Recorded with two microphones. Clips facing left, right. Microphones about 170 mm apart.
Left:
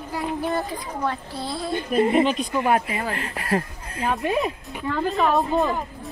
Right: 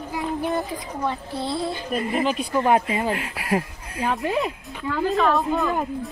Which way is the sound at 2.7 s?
25° right (ahead or behind).